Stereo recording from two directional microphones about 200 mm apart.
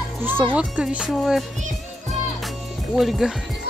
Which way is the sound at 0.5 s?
5° right (ahead or behind).